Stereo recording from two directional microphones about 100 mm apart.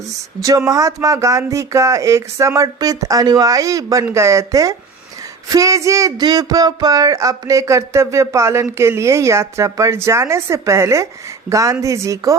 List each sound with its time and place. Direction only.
0.4 s speech: 35° right (ahead or behind)